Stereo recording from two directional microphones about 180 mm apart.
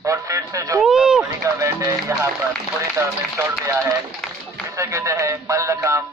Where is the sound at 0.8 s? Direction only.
5° right (ahead or behind).